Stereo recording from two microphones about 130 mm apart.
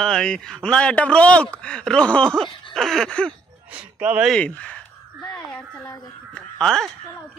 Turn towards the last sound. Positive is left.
turn(degrees=5)  # may be behind; listen again after turning